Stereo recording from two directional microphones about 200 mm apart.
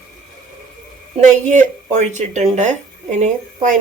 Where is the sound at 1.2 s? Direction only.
35° right (ahead or behind).